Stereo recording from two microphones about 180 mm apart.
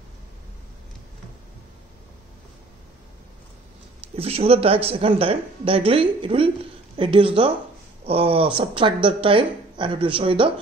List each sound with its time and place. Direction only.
4.1 s speech: 35° right (ahead or behind)